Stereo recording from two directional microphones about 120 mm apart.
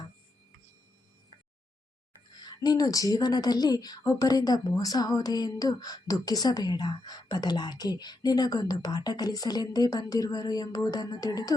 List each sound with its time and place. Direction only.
2.4 s speech: 35° left (ahead or behind)